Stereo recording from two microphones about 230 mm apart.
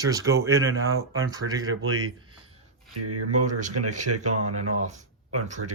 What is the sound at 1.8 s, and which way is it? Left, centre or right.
Speech, right.